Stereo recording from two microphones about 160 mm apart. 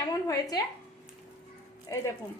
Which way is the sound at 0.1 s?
20° left (ahead or behind).